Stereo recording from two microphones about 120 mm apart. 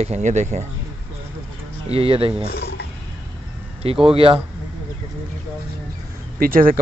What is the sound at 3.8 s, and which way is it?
Speech, 55° right (ahead or behind).